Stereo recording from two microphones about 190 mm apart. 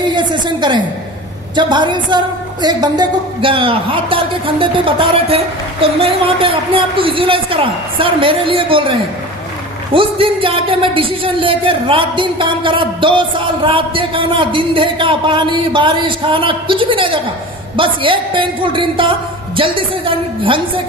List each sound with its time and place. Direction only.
0.1 s a woman's voice: 25° right (ahead or behind)